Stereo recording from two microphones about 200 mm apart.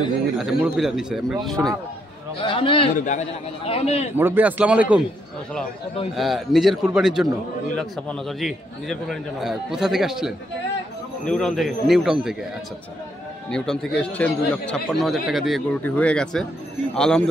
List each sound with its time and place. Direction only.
0.4 s a man's voice: centre (ahead or behind)
2.4 s a man's voice: 25° left (ahead or behind)
3.0 s a man's voice: 35° left (ahead or behind)
4.2 s speech: 10° right (ahead or behind)
6.1 s a man's voice: centre (ahead or behind)
13.5 s a man's voice: 5° left (ahead or behind)